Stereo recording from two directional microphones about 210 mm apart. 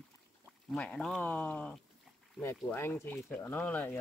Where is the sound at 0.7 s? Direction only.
5° left (ahead or behind).